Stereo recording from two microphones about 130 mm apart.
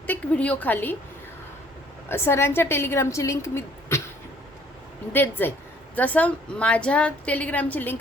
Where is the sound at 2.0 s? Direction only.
20° left (ahead or behind).